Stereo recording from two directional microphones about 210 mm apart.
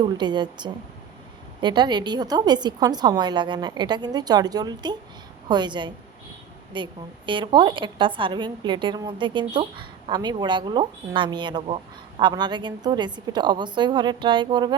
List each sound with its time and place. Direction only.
0.0 s a woman's voice: 20° right (ahead or behind)